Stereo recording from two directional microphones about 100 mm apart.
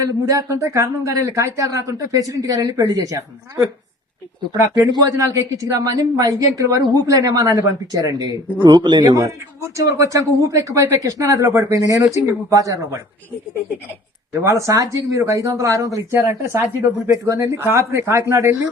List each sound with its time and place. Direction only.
0.6 s speech: 30° right (ahead or behind)
8.6 s a man's voice: 50° right (ahead or behind)
9.1 s speech: 30° right (ahead or behind)
14.4 s speech: 30° right (ahead or behind)
16.1 s speech: 25° right (ahead or behind)